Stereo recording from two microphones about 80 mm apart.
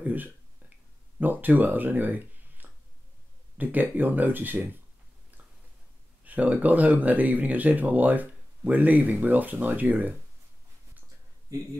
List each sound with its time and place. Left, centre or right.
0.0 s a sound: right
1.2 s speech: right
6.2 s speech: centre